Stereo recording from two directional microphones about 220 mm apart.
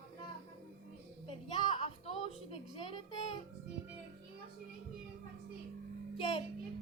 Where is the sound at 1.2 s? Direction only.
25° left (ahead or behind).